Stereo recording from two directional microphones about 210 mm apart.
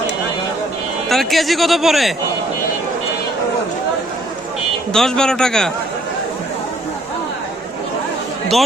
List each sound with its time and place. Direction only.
1.0 s speech: centre (ahead or behind)
4.9 s speech: 5° left (ahead or behind)